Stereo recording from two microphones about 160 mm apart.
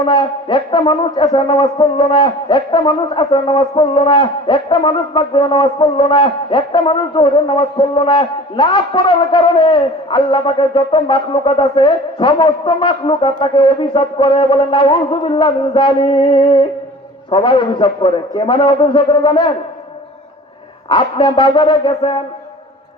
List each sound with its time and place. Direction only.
0.0 s speech: 30° left (ahead or behind)
20.9 s speech: 30° left (ahead or behind)